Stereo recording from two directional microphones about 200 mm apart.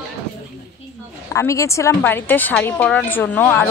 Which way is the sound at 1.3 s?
15° left (ahead or behind).